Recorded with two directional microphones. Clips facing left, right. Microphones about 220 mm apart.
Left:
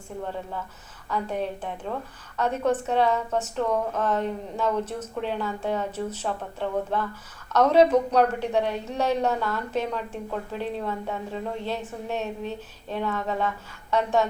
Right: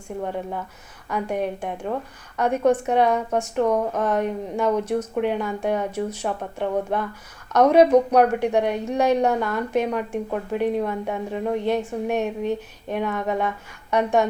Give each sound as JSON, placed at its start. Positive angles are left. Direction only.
{"t": 1.1, "sound": "a woman's voice", "side_deg": -15}